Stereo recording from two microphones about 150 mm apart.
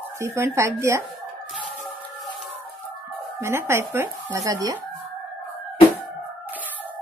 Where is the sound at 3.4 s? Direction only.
15° right (ahead or behind).